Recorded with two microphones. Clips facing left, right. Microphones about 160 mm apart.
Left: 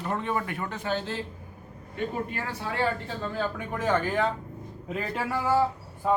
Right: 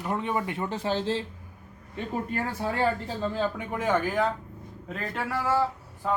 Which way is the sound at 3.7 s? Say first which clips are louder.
Left 2 dB; 15° right (ahead or behind).